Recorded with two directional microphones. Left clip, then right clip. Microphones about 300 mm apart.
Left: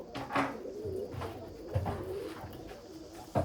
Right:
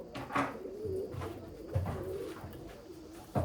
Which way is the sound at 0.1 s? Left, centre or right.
Left.